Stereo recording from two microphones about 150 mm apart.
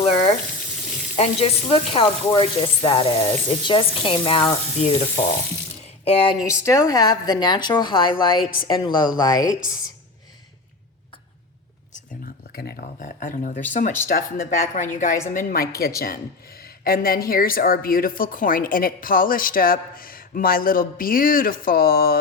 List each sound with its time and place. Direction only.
0.0 s water tap: 40° left (ahead or behind)
1.1 s speech: 40° left (ahead or behind)
4.8 s frying: 40° left (ahead or behind)
6.1 s speech: 40° left (ahead or behind)
6.4 s speech: 20° left (ahead or behind)
12.5 s speech: 85° left; by 15.6 s 65° left (ahead or behind)
15.8 s a woman's voice: 80° left